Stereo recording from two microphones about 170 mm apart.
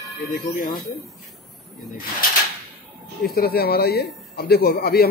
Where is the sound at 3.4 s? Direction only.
65° left (ahead or behind).